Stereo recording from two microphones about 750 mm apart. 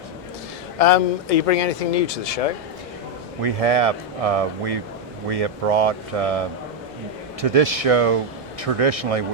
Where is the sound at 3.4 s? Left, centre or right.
Right.